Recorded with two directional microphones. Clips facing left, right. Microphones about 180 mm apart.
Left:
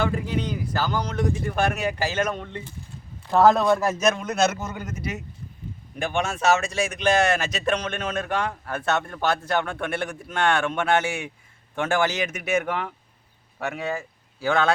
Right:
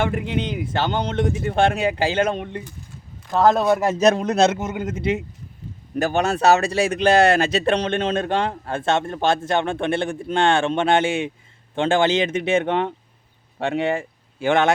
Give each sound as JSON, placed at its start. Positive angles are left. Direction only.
{"t": 0.1, "sound": "speech", "side_deg": -25}
{"t": 3.3, "sound": "a man's voice", "side_deg": 5}
{"t": 3.6, "sound": "speech", "side_deg": -20}
{"t": 6.0, "sound": "speech", "side_deg": -40}